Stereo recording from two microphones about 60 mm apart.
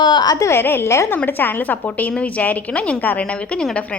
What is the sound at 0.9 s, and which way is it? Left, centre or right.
Speech, left.